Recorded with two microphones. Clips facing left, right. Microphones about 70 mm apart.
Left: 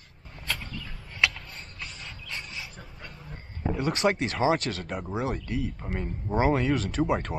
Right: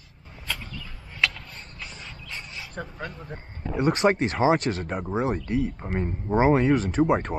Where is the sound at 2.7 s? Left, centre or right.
Right.